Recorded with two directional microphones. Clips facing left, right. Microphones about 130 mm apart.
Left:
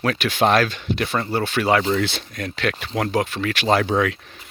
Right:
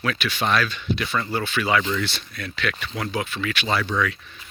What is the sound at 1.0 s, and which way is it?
Speech, 35° left (ahead or behind).